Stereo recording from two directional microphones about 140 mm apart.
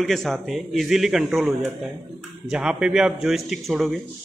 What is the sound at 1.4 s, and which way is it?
A man's voice, 15° right (ahead or behind).